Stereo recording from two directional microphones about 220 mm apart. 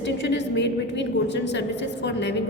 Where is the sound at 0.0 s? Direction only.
55° left (ahead or behind).